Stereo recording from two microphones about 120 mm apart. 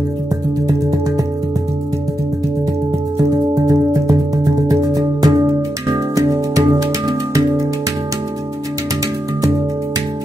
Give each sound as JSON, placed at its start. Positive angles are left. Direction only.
{"t": 3.2, "sound": "music", "side_deg": -30}